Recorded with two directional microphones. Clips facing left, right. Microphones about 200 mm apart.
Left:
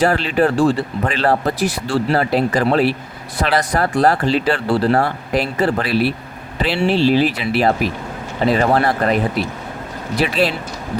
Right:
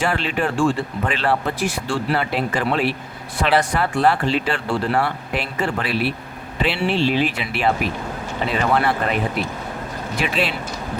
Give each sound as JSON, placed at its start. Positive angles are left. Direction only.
{"t": 0.0, "sound": "speech", "side_deg": 40}
{"t": 10.2, "sound": "speech", "side_deg": 40}